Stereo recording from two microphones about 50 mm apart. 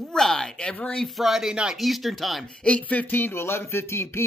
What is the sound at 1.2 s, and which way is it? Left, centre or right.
Speech, centre.